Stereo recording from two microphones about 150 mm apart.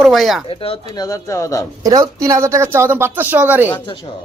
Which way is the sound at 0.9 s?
25° left (ahead or behind).